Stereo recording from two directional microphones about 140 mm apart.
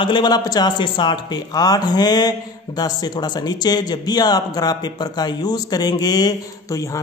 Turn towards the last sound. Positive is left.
turn(degrees=25)  # may be behind; listen again after turning